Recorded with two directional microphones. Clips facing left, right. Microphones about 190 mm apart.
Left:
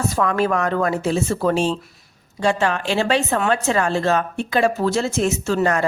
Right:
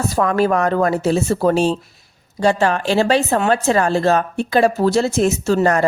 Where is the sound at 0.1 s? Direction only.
40° right (ahead or behind).